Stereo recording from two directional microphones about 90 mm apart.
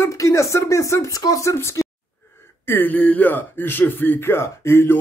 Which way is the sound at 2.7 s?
20° left (ahead or behind).